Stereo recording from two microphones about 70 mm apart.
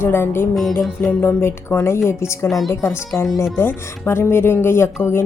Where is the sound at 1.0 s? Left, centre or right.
Left.